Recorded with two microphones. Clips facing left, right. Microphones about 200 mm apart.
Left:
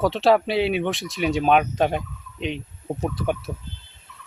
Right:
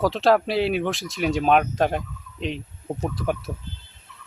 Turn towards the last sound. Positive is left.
turn(degrees=0)  # may be behind; listen again after turning